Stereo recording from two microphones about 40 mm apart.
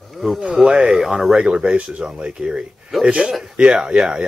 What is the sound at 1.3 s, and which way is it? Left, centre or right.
Speech, right.